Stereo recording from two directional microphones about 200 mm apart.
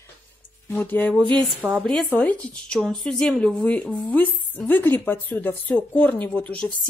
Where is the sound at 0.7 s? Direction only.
10° left (ahead or behind).